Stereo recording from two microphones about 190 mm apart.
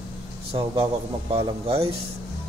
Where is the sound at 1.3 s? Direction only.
30° right (ahead or behind).